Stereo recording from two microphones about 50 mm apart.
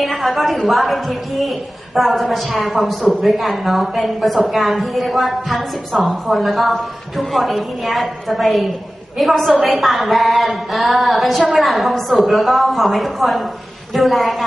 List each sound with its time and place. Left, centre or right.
0.0 s a woman's voice: centre